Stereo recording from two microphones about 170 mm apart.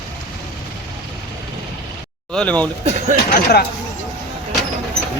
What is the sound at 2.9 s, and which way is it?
Speech, 40° right (ahead or behind).